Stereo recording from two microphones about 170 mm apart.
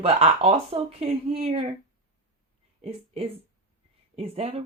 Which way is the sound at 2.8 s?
35° right (ahead or behind).